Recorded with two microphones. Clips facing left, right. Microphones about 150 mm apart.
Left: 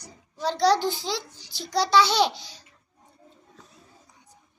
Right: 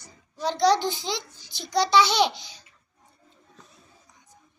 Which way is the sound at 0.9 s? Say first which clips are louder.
Left 1 dB; 20° right (ahead or behind).